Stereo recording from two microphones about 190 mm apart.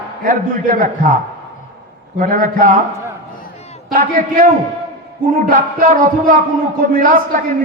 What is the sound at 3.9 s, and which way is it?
A man's voice, 45° right (ahead or behind).